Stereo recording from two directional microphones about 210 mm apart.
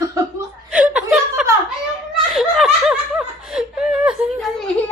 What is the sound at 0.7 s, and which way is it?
Chuckle, 5° right (ahead or behind).